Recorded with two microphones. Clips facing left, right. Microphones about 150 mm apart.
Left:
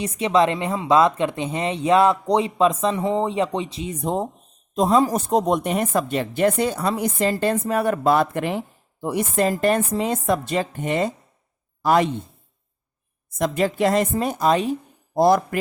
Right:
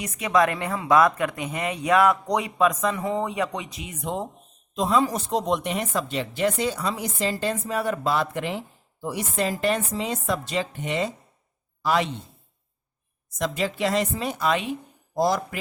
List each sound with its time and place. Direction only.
0.0 s speech: 30° left (ahead or behind); by 12.1 s 50° left (ahead or behind)
13.4 s speech: 50° left (ahead or behind)
15.1 s speech: 55° left (ahead or behind)